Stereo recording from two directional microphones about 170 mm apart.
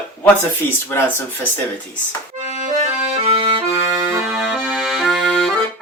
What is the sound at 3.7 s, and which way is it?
Accordion, 15° right (ahead or behind).